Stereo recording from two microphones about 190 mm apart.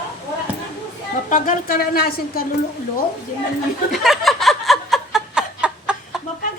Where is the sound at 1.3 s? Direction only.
45° left (ahead or behind).